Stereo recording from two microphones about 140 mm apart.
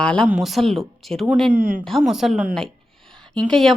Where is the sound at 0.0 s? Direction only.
5° left (ahead or behind).